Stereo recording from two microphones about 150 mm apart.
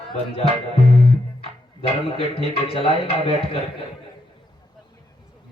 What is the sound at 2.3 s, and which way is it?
A man's voice, 40° left (ahead or behind).